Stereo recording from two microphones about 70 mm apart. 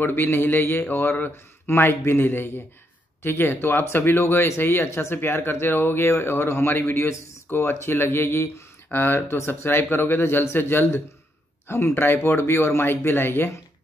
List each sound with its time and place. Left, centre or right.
0.0 s speech: left